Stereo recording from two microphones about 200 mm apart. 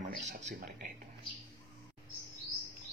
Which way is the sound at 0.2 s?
35° right (ahead or behind).